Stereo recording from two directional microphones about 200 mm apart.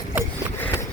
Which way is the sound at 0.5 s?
10° left (ahead or behind).